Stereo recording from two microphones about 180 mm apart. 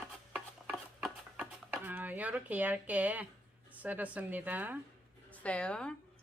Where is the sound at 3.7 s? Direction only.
10° right (ahead or behind).